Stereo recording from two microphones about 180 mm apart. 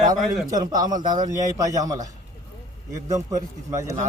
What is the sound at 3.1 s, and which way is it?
Speech, 15° right (ahead or behind).